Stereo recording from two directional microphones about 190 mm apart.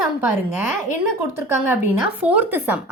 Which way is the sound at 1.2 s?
10° right (ahead or behind).